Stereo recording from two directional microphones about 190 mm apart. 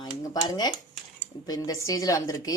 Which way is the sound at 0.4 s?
20° left (ahead or behind).